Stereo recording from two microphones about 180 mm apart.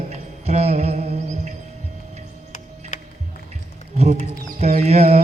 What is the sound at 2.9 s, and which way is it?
Music, 45° left (ahead or behind).